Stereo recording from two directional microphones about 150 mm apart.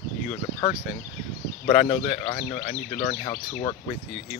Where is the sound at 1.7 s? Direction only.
45° left (ahead or behind).